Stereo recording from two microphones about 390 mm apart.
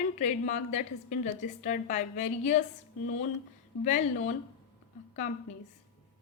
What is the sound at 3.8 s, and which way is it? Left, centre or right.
Speech, centre.